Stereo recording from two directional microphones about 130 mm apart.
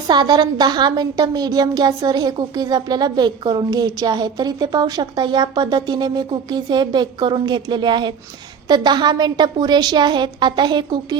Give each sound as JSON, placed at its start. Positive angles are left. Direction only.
{"t": 0.1, "sound": "a woman's voice", "side_deg": -35}